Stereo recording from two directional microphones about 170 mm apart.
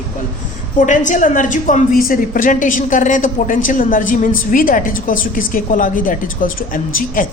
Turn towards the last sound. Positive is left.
turn(degrees=55)  # may be behind; listen again after turning